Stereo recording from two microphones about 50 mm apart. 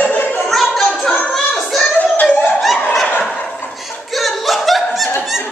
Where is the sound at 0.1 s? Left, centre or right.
Left.